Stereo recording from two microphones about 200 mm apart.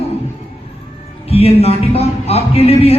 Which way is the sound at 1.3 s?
30° left (ahead or behind).